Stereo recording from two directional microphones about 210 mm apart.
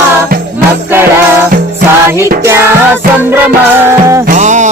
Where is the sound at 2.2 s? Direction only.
10° right (ahead or behind).